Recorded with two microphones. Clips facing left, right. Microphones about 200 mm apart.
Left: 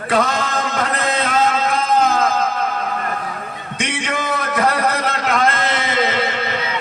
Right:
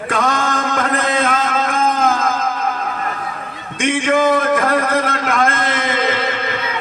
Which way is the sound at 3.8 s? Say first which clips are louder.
Right 9 dB; 50° right (ahead or behind).